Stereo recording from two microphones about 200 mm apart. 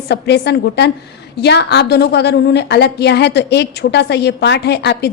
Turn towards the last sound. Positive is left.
turn(degrees=55)  # may be behind; listen again after turning